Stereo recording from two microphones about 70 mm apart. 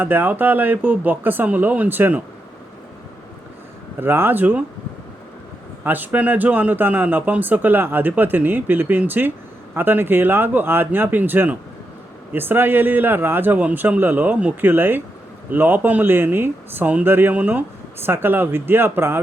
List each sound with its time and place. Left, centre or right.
0.0 s speech: right
4.0 s speech: right
5.8 s speech: right